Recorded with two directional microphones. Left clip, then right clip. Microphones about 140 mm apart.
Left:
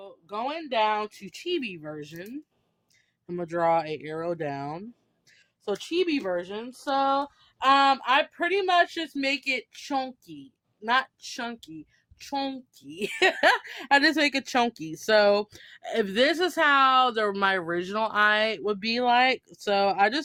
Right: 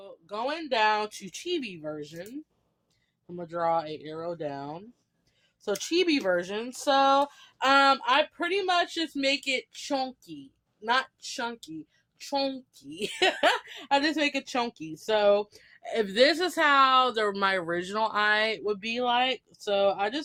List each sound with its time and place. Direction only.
0.0 s speech: 25° left (ahead or behind); by 1.3 s 5° left (ahead or behind)
1.3 s a woman's voice: 25° left (ahead or behind); by 2.3 s 40° left (ahead or behind)
3.2 s speech: 65° left (ahead or behind)
5.6 s speech: 5° left (ahead or behind); by 7.3 s 15° right (ahead or behind)
7.6 s speech: centre (ahead or behind)
7.9 s a woman's voice: 15° left (ahead or behind); by 20.2 s 45° left (ahead or behind)